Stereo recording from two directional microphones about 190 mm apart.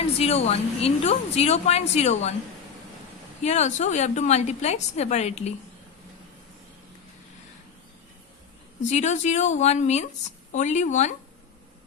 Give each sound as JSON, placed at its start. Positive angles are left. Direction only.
{"t": 0.2, "sound": "a woman's voice", "side_deg": 35}
{"t": 3.4, "sound": "a woman's voice", "side_deg": 35}
{"t": 8.9, "sound": "a woman's voice", "side_deg": 40}